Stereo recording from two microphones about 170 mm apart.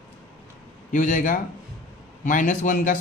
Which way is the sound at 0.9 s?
50° left (ahead or behind).